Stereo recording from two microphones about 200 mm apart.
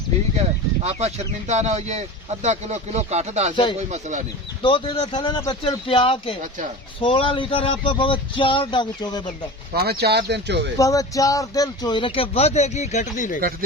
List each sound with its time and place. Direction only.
0.3 s speech: 35° right (ahead or behind)
3.5 s speech: 25° left (ahead or behind)
3.8 s speech: 35° right (ahead or behind)
4.6 s speech: 25° left (ahead or behind)
9.7 s speech: 50° right (ahead or behind)
10.8 s speech: 15° left (ahead or behind); by 13.4 s 40° left (ahead or behind)